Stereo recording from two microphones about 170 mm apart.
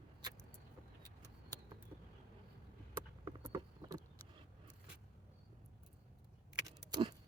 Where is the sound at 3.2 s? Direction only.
20° right (ahead or behind).